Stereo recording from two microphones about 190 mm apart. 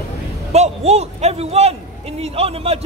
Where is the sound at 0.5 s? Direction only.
35° right (ahead or behind).